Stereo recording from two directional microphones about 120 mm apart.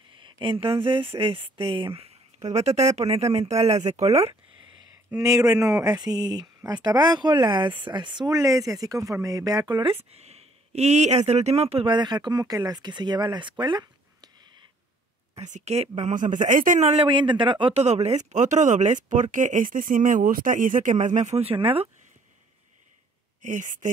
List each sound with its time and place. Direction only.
0.1 s speech: 45° right (ahead or behind)
2.4 s speech: 65° right (ahead or behind)
5.2 s speech: 30° right (ahead or behind)
9.9 s speech: 65° right (ahead or behind)
11.9 s speech: 40° right (ahead or behind)
15.4 s speech: 75° right (ahead or behind)
17.0 s a man's voice: 40° right (ahead or behind)
17.7 s speech: 65° right (ahead or behind)
21.5 s a man's voice: 50° right (ahead or behind)
23.4 s speech: 90° right